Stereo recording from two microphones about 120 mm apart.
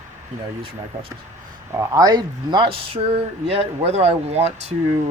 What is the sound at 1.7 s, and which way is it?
Speech, 30° right (ahead or behind).